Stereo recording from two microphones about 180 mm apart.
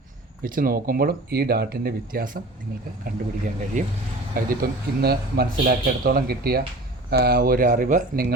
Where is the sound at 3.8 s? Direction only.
45° right (ahead or behind).